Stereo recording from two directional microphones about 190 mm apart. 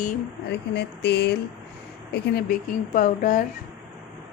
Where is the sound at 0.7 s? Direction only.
60° left (ahead or behind).